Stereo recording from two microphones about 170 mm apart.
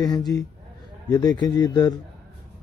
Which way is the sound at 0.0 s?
20° left (ahead or behind).